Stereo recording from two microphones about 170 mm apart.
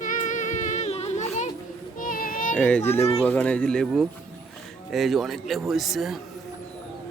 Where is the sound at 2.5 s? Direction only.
10° left (ahead or behind).